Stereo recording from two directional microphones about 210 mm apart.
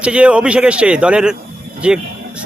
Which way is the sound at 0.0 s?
5° right (ahead or behind).